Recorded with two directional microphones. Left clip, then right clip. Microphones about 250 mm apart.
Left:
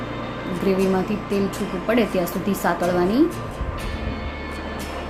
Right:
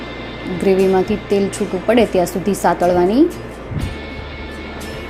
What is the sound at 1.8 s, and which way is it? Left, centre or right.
A woman's voice, centre.